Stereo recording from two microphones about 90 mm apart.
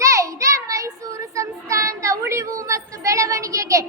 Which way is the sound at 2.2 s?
30° right (ahead or behind).